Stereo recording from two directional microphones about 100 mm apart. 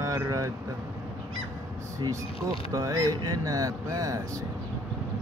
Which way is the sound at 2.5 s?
35° right (ahead or behind).